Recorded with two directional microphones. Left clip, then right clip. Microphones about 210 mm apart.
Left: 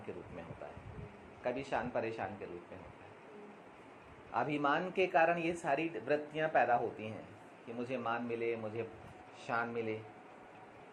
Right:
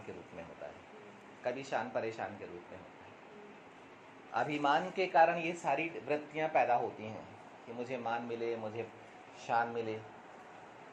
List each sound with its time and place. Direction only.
1.5 s a woman's voice: 30° left (ahead or behind)
4.4 s a woman's voice: 30° left (ahead or behind)
7.9 s a woman's voice: 35° left (ahead or behind)